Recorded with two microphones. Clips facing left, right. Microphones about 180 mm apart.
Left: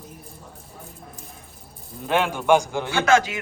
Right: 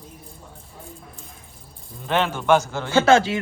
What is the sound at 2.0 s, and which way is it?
A man's voice, 10° left (ahead or behind).